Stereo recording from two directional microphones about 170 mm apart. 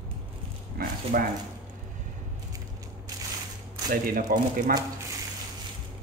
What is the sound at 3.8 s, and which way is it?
Speech, 55° right (ahead or behind).